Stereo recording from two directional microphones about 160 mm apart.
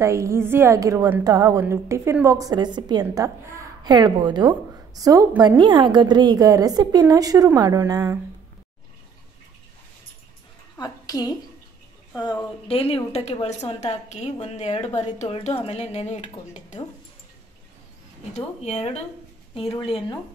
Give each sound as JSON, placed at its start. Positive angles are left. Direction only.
{"t": 0.0, "sound": "a woman's voice", "side_deg": -15}
{"t": 10.8, "sound": "a woman's voice", "side_deg": 25}
{"t": 12.6, "sound": "a woman's voice", "side_deg": 35}
{"t": 18.3, "sound": "a woman's voice", "side_deg": 45}